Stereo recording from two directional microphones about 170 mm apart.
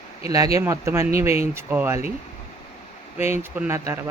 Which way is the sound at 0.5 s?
15° right (ahead or behind).